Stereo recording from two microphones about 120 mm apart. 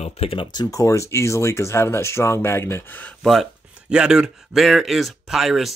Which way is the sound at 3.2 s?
Centre (ahead or behind).